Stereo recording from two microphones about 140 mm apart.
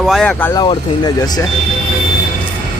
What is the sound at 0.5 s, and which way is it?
Speech, 30° left (ahead or behind).